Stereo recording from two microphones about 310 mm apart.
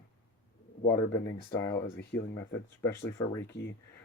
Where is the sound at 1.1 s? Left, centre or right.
Centre.